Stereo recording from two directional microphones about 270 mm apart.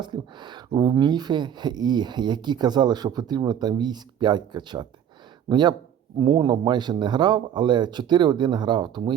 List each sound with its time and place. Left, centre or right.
0.0 s speech: centre